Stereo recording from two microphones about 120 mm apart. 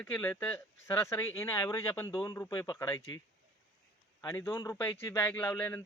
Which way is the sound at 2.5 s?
30° left (ahead or behind).